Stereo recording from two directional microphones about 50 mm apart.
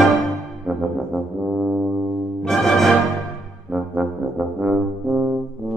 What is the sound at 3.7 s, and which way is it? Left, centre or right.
Brass instrument, centre.